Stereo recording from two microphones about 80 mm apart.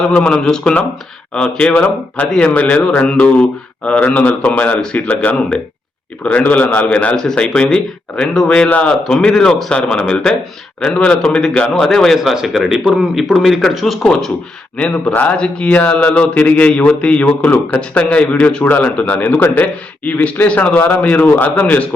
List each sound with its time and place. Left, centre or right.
0.1 s a man's voice: centre
14.8 s a man's voice: centre